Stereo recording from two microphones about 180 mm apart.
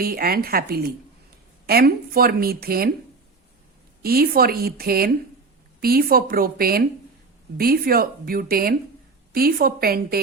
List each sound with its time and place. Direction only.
0.0 s a woman's voice: 55° right (ahead or behind)
4.0 s a woman's voice: 55° right (ahead or behind)